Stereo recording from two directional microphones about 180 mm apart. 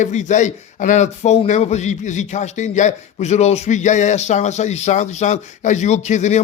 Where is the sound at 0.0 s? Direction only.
40° left (ahead or behind).